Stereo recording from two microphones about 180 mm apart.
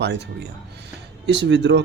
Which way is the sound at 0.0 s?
70° right (ahead or behind).